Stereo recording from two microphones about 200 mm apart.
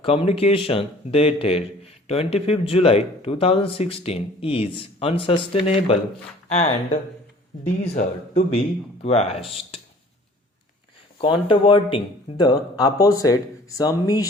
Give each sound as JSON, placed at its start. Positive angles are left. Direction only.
{"t": 0.0, "sound": "a man's voice", "side_deg": 30}
{"t": 11.2, "sound": "a man's voice", "side_deg": 25}